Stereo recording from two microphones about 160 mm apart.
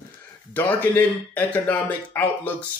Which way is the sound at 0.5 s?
10° left (ahead or behind).